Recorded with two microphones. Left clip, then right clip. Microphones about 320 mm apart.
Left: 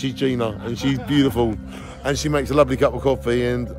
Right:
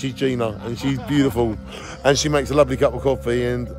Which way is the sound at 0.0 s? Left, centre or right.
Centre.